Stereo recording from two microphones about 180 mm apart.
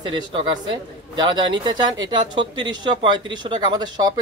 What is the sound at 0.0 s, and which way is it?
A man's voice, 25° right (ahead or behind).